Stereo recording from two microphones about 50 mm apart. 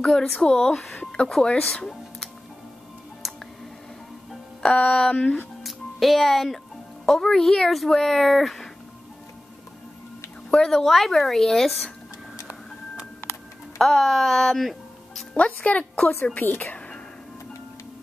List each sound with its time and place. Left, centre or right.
0.0 s a woman's voice: centre
1.2 s speech: left
4.6 s a woman's voice: left
5.6 s music: centre
7.1 s speech: centre
10.5 s a woman's voice: centre
13.7 s speech: centre
15.3 s speech: left
16.3 s speech: left
16.6 s music: centre